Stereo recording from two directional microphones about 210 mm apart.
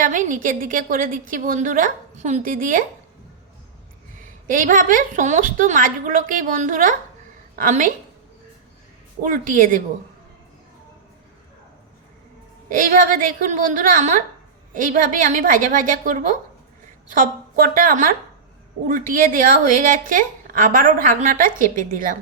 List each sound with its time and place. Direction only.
0.0 s a woman's voice: 40° right (ahead or behind)
4.4 s a woman's voice: 40° right (ahead or behind)
9.2 s a woman's voice: 40° right (ahead or behind)
12.6 s a woman's voice: 40° right (ahead or behind)